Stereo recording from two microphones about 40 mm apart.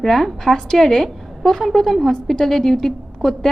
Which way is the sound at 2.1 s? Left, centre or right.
Centre.